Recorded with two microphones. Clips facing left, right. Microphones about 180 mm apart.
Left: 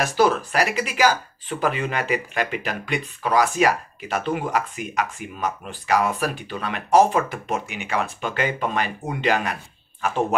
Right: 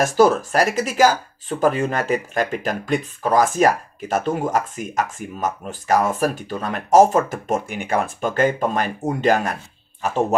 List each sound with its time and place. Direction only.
0.0 s speech: 45° right (ahead or behind)